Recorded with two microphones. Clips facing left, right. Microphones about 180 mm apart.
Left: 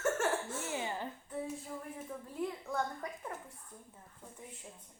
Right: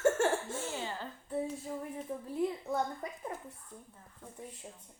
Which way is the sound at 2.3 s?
15° right (ahead or behind).